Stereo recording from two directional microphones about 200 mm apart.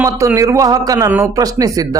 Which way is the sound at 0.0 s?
15° right (ahead or behind).